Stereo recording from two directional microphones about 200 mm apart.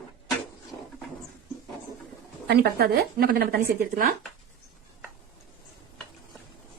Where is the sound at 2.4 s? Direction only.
55° right (ahead or behind).